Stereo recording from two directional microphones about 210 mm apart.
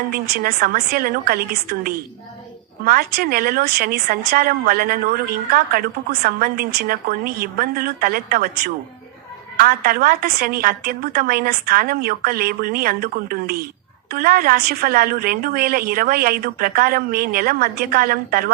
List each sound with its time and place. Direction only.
0.1 s a woman's voice: 45° right (ahead or behind)